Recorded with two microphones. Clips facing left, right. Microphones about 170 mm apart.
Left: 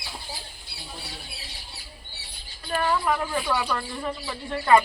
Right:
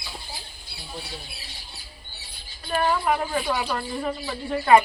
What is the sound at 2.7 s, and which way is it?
Speech, 25° right (ahead or behind).